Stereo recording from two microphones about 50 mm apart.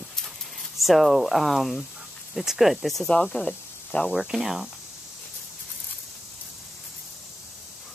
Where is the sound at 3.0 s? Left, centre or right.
Centre.